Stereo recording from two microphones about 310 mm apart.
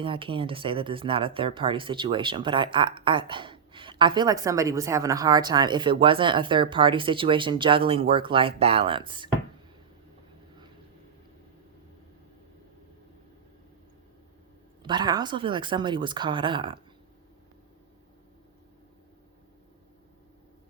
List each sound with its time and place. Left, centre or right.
0.0 s speech: centre
14.8 s speech: centre